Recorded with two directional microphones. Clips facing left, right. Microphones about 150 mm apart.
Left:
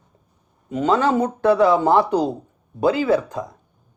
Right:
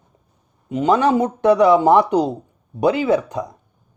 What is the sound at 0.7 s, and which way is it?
Speech, 20° right (ahead or behind).